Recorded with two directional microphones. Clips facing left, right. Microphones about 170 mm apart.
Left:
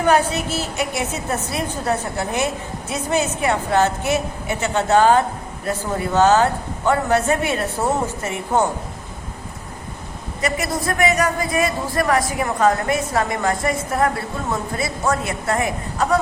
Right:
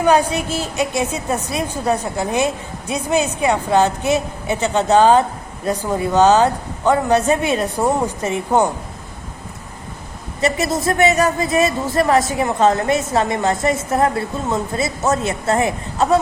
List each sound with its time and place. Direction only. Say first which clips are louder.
0.0 s a woman's voice: right 2 dB; 15° right (ahead or behind)
10.4 s a woman's voice: right 4 dB; 25° right (ahead or behind)